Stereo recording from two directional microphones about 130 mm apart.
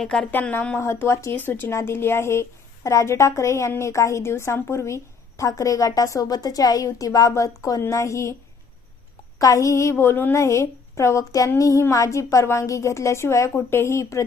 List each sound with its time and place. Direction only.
0.0 s speech: 5° left (ahead or behind)
0.8 s a woman's voice: 20° left (ahead or behind)
9.4 s a woman's voice: 25° left (ahead or behind)